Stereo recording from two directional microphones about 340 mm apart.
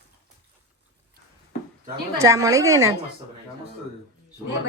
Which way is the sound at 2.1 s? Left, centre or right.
Centre.